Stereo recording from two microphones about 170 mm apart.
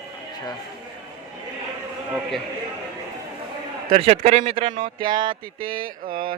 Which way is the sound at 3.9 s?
35° right (ahead or behind).